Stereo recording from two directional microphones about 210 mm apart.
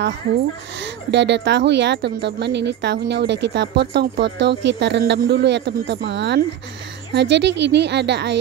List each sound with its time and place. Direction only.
1.1 s a woman's voice: 55° right (ahead or behind)